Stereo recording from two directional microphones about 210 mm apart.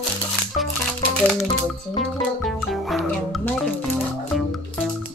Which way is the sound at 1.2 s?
5° left (ahead or behind).